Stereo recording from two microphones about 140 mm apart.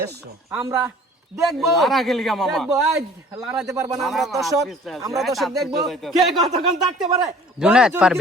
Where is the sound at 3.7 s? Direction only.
25° right (ahead or behind).